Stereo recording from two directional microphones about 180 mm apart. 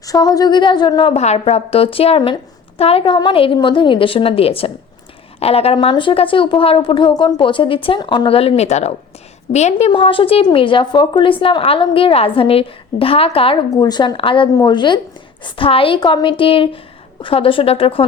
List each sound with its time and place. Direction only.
0.0 s a woman's voice: 20° left (ahead or behind)